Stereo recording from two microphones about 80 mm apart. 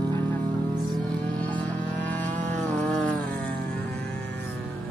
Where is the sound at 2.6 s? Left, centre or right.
Centre.